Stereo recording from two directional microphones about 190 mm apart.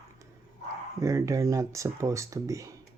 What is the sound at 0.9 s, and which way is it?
Speech, 15° right (ahead or behind).